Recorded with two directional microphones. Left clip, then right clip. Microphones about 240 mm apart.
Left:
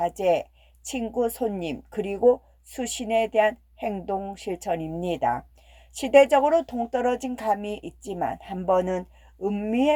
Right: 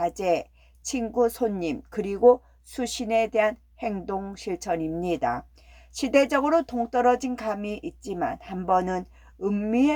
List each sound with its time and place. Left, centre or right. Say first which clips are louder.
0.0 s speech: left 2 dB; centre